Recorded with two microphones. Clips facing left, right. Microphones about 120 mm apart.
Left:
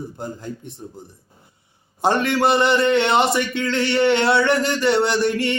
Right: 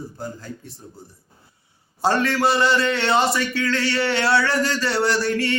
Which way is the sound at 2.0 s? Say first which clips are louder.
Left 2 dB; 20° left (ahead or behind).